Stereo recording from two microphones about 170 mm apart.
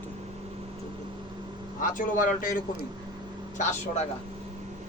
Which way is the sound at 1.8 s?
55° left (ahead or behind).